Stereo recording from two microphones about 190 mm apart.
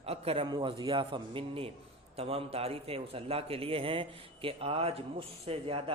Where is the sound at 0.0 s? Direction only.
30° right (ahead or behind).